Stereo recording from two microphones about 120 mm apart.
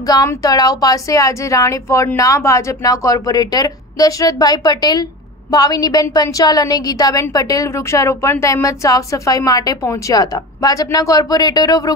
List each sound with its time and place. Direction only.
0.0 s a woman's voice: 30° left (ahead or behind)